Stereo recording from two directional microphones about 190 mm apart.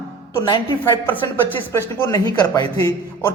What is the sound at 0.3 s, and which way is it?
A man's voice, 25° left (ahead or behind).